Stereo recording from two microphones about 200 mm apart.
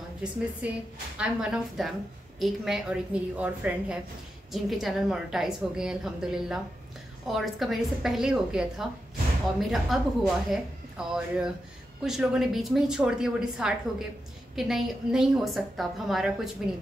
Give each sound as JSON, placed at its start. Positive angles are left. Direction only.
{"t": 1.1, "sound": "a woman's voice", "side_deg": -5}